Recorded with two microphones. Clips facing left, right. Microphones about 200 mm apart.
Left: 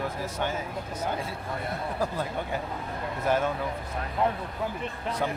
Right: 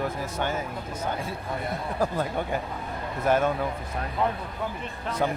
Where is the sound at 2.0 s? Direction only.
50° right (ahead or behind).